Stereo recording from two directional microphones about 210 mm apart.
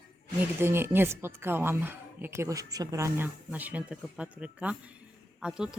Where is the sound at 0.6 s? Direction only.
10° right (ahead or behind).